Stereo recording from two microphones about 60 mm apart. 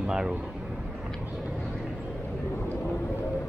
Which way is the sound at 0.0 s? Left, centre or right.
Centre.